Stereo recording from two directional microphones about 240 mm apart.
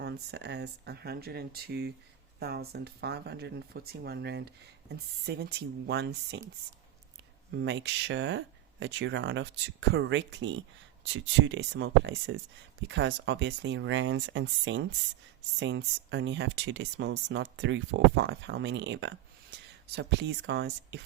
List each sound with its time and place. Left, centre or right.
0.0 s speech: right
7.5 s speech: right